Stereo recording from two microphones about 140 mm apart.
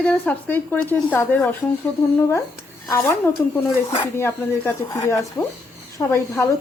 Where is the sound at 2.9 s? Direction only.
20° left (ahead or behind).